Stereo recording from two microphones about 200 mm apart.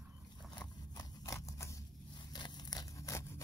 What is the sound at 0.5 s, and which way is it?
Scissors, 15° left (ahead or behind).